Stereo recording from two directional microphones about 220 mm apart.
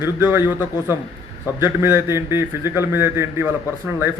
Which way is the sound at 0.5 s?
15° left (ahead or behind).